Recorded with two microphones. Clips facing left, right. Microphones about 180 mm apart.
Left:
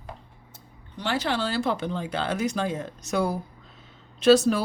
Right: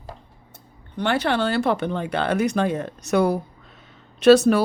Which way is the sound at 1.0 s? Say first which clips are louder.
Right 5 dB; 60° right (ahead or behind).